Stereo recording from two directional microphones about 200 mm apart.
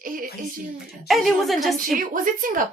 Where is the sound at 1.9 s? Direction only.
45° right (ahead or behind).